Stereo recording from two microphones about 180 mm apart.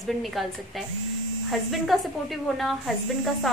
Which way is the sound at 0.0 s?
Centre (ahead or behind).